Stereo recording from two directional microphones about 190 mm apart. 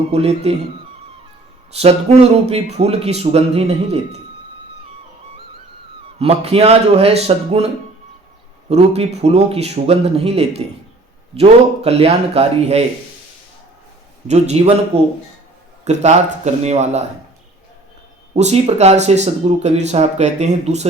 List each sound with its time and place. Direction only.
0.1 s a man's voice: 35° right (ahead or behind)
1.7 s a man's voice: 35° right (ahead or behind)
6.1 s a man's voice: 35° right (ahead or behind)
8.7 s a man's voice: 35° right (ahead or behind)
14.3 s a man's voice: 35° right (ahead or behind)
18.3 s a man's voice: 35° right (ahead or behind)